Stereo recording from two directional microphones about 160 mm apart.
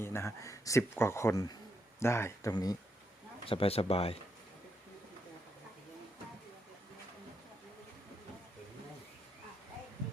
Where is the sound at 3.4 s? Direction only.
35° left (ahead or behind).